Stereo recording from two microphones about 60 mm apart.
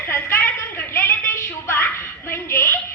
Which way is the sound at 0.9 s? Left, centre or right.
Left.